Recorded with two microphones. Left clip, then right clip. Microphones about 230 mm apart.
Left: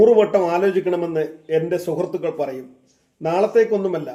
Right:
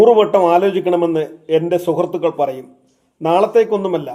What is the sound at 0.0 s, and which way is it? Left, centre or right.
A man's voice, centre.